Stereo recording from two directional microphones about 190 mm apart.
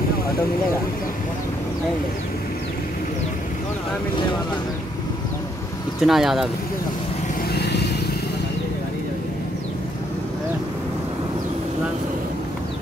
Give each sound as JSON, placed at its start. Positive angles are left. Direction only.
{"t": 5.9, "sound": "speech", "side_deg": 0}
{"t": 7.5, "sound": "vehicle", "side_deg": 60}